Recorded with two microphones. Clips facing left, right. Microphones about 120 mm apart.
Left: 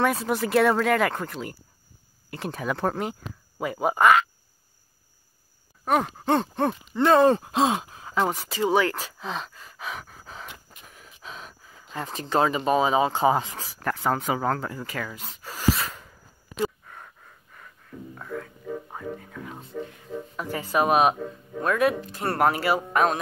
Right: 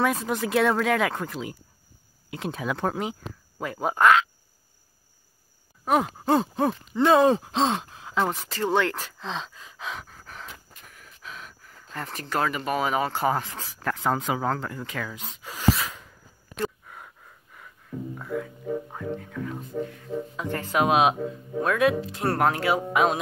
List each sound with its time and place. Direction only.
0.0 s groan: 5° left (ahead or behind)
5.9 s groan: 5° right (ahead or behind)
8.3 s groan: 10° left (ahead or behind)
10.4 s a sound: 5° left (ahead or behind)
10.9 s a sound: 25° left (ahead or behind)
11.6 s speech: 10° left (ahead or behind)
13.7 s speech: centre (ahead or behind)
16.8 s a sound: 5° right (ahead or behind)
18.1 s groan: 5° right (ahead or behind)